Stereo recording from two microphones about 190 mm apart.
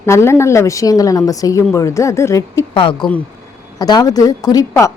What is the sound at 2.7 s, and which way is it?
Speech, 25° left (ahead or behind).